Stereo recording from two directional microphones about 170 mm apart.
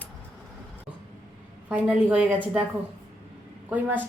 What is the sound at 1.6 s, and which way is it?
A woman's voice, 5° right (ahead or behind).